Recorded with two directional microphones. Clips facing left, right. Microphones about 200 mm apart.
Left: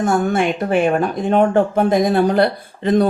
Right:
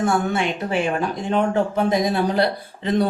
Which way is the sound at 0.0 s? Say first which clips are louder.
Left 4 dB; 50° left (ahead or behind).